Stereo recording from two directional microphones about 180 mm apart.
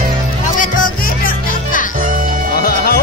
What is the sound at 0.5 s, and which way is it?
Music, 50° left (ahead or behind).